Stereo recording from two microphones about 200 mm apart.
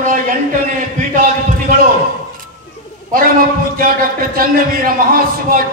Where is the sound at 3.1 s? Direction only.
45° right (ahead or behind).